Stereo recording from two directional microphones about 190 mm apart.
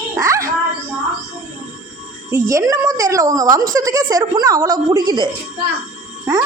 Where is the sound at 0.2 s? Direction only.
15° right (ahead or behind).